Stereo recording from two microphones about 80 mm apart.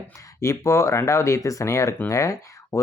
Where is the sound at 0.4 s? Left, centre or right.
Left.